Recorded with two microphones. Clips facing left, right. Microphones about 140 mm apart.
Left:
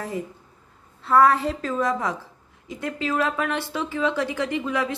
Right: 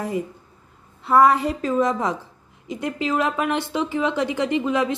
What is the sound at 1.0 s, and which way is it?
A woman's voice, 15° right (ahead or behind).